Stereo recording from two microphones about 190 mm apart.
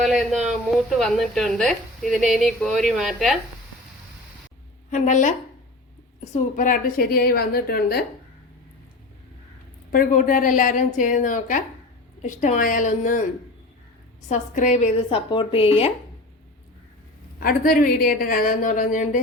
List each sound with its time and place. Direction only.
0.0 s a woman's voice: centre (ahead or behind)
4.9 s a woman's voice: 40° left (ahead or behind)
9.9 s a woman's voice: 45° left (ahead or behind)
14.3 s a woman's voice: 40° left (ahead or behind)
17.4 s a woman's voice: 50° left (ahead or behind)